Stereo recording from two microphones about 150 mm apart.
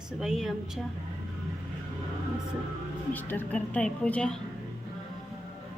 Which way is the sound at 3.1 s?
10° left (ahead or behind).